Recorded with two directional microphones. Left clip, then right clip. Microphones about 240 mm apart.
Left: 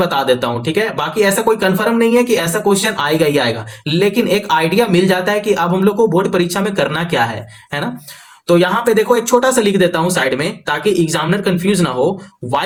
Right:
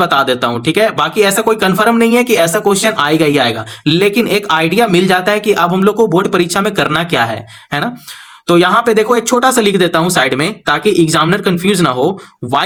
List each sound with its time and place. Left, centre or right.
0.0 s speech: right
8.4 s speech: right